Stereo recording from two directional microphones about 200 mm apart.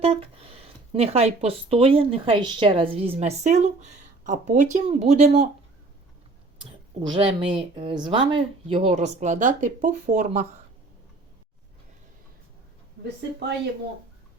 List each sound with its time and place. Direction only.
0.0 s speech: 30° right (ahead or behind)
7.1 s speech: 25° right (ahead or behind)